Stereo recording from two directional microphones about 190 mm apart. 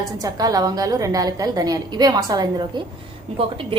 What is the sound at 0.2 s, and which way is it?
A woman's voice, 20° right (ahead or behind).